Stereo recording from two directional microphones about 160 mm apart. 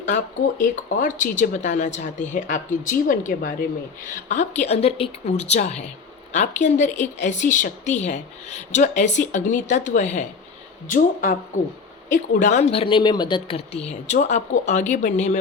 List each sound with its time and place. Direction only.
0.6 s speech: 55° left (ahead or behind); by 13.8 s 30° left (ahead or behind)
14.1 s speech: 50° left (ahead or behind)